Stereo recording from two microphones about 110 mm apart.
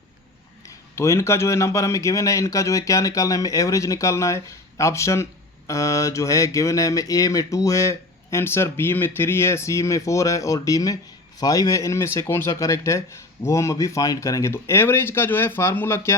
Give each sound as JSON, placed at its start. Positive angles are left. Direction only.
{"t": 0.9, "sound": "speech", "side_deg": 25}